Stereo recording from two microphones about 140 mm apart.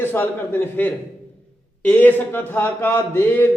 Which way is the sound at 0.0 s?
15° left (ahead or behind).